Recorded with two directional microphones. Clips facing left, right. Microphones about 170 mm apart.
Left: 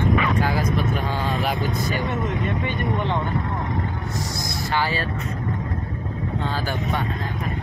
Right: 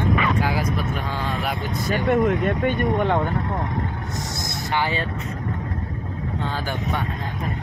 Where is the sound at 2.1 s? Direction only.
55° right (ahead or behind).